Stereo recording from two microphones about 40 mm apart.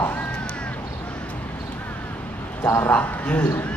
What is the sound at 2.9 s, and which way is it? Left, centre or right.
Speech, left.